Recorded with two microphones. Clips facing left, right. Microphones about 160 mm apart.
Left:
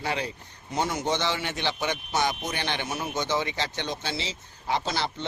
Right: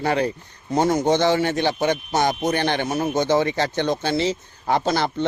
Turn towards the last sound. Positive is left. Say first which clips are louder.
# right 8 dB
turn(degrees=-50)  # may be behind; listen again after turning